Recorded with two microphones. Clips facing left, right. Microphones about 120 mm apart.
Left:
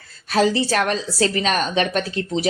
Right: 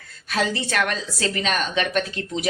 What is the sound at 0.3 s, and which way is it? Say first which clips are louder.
A woman's voice: left 6 dB; 35° left (ahead or behind).